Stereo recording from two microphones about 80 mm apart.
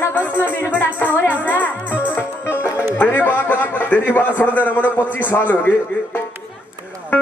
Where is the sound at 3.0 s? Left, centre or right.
Left.